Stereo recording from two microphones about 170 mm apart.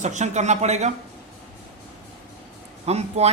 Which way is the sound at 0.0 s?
45° right (ahead or behind).